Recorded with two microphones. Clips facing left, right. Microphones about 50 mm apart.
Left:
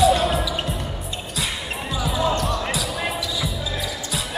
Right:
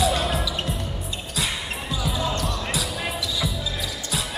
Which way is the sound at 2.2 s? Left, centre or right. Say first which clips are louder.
Left 8 dB; centre.